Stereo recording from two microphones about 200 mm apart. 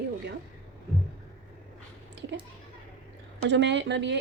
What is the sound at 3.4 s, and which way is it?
Speech, 60° right (ahead or behind).